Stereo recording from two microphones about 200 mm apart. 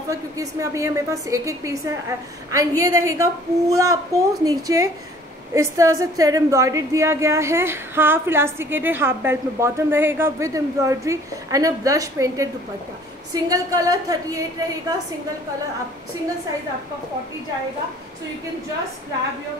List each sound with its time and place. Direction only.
0.1 s a woman's voice: 15° right (ahead or behind)